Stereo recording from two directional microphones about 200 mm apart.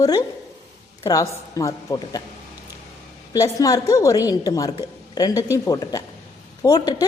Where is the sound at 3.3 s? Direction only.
15° left (ahead or behind).